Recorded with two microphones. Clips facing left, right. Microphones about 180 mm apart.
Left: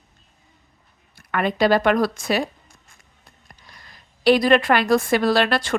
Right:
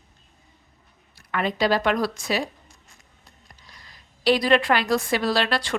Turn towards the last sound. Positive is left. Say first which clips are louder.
# left 4 dB
turn(degrees=55)  # may be behind; listen again after turning